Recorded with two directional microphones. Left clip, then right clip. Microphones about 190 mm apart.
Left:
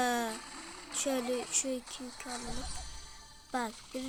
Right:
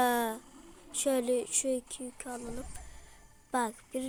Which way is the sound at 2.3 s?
25° left (ahead or behind).